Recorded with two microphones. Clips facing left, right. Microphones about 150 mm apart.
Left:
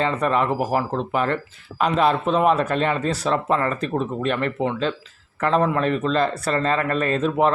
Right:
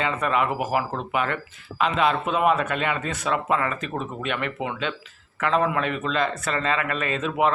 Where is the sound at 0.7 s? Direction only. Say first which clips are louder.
Left 3 dB; 10° right (ahead or behind).